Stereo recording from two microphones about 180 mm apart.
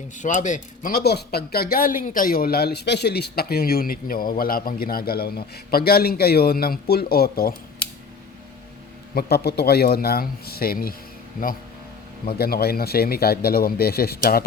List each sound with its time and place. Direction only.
0.2 s speech: 45° left (ahead or behind)
9.1 s speech: 60° left (ahead or behind)
12.4 s speech: 60° left (ahead or behind)